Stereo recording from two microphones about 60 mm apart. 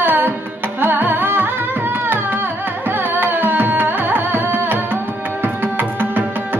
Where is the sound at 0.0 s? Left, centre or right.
Right.